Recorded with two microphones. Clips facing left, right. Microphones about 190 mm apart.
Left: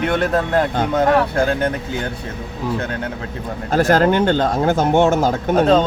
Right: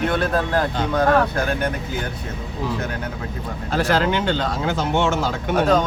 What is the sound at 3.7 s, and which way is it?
Speech, 45° left (ahead or behind).